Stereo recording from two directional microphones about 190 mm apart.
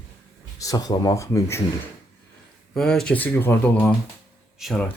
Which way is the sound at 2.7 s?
5° left (ahead or behind).